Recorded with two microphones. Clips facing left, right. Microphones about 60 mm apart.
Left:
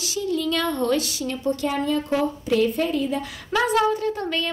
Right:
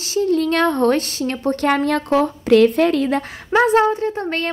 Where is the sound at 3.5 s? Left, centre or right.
Right.